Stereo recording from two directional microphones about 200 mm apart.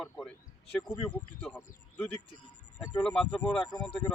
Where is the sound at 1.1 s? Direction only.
5° left (ahead or behind).